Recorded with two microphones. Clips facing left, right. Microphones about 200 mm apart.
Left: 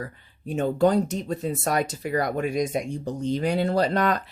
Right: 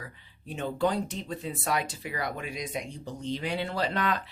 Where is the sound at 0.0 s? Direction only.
45° left (ahead or behind).